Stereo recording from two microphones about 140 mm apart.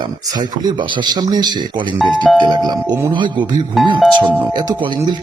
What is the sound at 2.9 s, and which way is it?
Speech, 30° right (ahead or behind).